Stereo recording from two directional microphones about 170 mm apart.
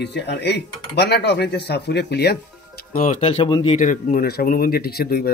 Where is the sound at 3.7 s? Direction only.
50° left (ahead or behind); by 5.3 s 65° left (ahead or behind).